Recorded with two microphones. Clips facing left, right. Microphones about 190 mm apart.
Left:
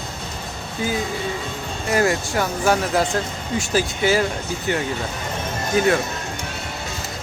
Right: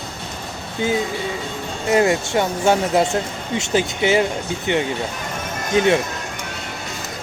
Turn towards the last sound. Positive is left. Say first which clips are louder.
# right 2 dB
turn(degrees=-25)  # may be behind; listen again after turning